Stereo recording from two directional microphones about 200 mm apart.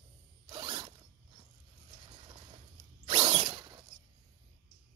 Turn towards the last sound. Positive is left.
turn(degrees=-20)  # may be behind; listen again after turning